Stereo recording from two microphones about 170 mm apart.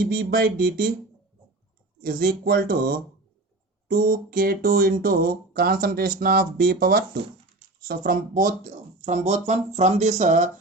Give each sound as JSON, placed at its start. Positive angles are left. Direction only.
{"t": 0.0, "sound": "speech", "side_deg": -60}
{"t": 2.0, "sound": "speech", "side_deg": -55}